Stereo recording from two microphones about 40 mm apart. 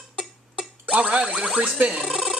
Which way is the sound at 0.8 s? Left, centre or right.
Right.